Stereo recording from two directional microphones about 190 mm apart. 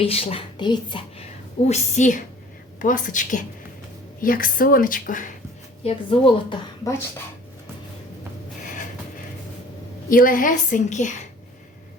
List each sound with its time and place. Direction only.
0.0 s a woman's voice: 30° left (ahead or behind)
1.6 s a woman's voice: 35° left (ahead or behind)
5.8 s a woman's voice: 25° left (ahead or behind)
10.1 s a woman's voice: 45° left (ahead or behind)